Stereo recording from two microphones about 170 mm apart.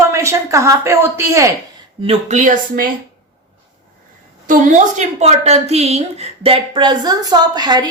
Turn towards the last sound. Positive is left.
turn(degrees=-25)  # may be behind; listen again after turning